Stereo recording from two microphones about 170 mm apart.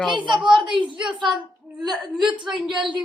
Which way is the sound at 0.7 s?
30° right (ahead or behind).